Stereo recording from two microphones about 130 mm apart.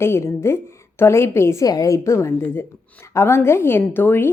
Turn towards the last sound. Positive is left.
turn(degrees=15)  # may be behind; listen again after turning